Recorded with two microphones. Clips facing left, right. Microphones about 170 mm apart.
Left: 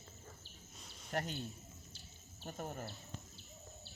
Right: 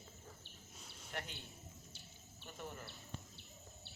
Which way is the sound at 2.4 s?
45° left (ahead or behind).